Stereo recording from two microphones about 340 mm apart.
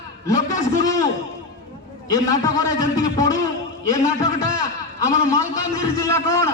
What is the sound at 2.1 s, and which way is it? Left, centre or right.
A man's voice, centre.